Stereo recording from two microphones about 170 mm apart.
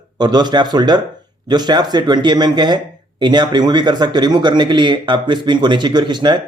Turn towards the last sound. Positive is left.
turn(degrees=-25)  # may be behind; listen again after turning